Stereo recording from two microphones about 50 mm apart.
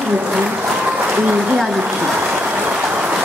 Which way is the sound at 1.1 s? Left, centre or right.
Right.